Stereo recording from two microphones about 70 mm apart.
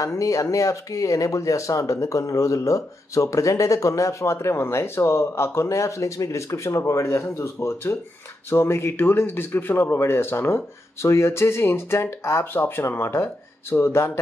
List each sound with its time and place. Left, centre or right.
0.0 s a man's voice: left